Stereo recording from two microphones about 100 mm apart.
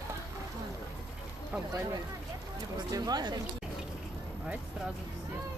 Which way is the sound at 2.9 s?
40° right (ahead or behind).